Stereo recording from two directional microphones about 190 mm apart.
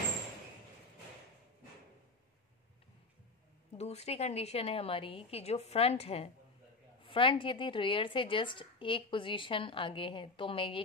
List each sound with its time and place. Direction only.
3.7 s a woman's voice: 35° left (ahead or behind)